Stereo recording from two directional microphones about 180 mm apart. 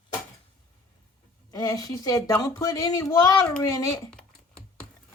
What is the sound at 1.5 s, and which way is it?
A woman's voice, 20° left (ahead or behind).